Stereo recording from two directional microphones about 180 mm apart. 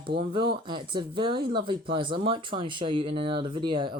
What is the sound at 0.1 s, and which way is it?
Speech, 65° right (ahead or behind).